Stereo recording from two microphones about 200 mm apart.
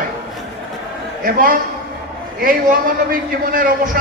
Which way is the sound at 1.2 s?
45° right (ahead or behind).